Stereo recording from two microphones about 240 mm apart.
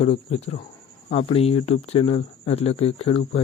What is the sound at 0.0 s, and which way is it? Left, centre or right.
Speech, left.